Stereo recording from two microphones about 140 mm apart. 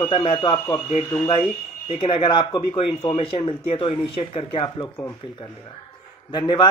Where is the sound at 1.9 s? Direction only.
40° left (ahead or behind).